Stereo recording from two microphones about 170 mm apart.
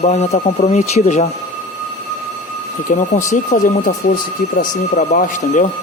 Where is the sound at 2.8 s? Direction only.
45° left (ahead or behind).